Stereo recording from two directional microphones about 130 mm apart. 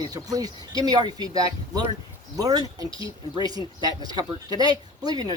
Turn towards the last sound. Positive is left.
turn(degrees=-30)  # may be behind; listen again after turning